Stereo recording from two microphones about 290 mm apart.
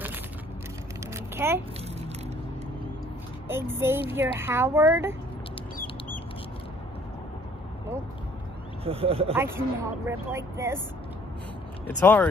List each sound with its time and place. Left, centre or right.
1.1 s a sound: centre
3.4 s speech: centre
8.8 s speech: centre
9.3 s speech: centre
12.0 s speech: centre